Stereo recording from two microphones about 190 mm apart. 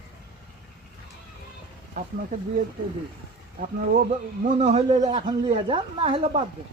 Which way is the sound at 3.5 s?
50° right (ahead or behind).